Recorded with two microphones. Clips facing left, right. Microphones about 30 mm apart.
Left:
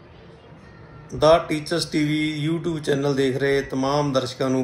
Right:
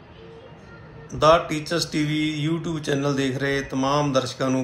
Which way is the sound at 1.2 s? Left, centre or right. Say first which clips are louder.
Left 1 dB; centre.